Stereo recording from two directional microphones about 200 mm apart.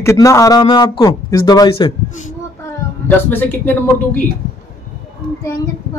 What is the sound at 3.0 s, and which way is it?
Speech, 10° left (ahead or behind).